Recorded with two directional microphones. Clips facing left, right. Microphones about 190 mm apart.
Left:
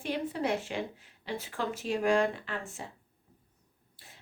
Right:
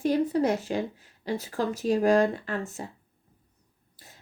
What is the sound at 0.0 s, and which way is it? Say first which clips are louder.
Speech: right 8 dB; 40° right (ahead or behind).